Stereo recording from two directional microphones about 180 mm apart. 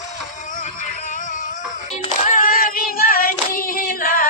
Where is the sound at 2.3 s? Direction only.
50° left (ahead or behind).